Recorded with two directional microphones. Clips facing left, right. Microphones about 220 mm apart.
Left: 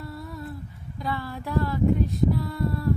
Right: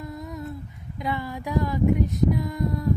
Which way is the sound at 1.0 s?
15° right (ahead or behind).